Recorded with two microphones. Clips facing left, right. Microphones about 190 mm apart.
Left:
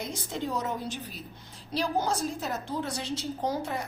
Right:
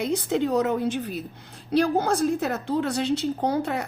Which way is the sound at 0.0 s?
65° right (ahead or behind).